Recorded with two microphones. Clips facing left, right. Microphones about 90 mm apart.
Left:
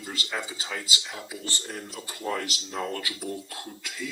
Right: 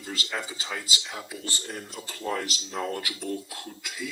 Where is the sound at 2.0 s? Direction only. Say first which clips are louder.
Even; 20° left (ahead or behind).